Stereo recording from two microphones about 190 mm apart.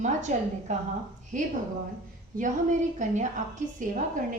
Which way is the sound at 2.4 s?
40° right (ahead or behind).